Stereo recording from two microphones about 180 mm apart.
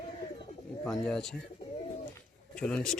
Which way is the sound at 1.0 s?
5° left (ahead or behind).